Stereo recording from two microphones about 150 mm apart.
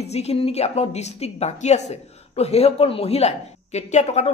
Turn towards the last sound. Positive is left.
turn(degrees=45)  # may be behind; listen again after turning